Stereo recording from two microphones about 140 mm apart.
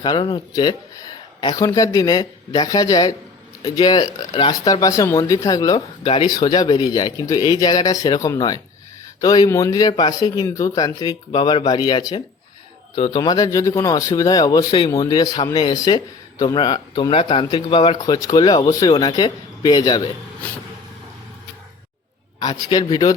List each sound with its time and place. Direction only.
0.0 s speech: 35° left (ahead or behind)
17.9 s speech: 25° left (ahead or behind)
22.4 s speech: 30° left (ahead or behind)